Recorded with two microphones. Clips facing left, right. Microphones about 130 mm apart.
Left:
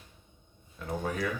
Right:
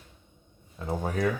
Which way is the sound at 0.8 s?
25° right (ahead or behind).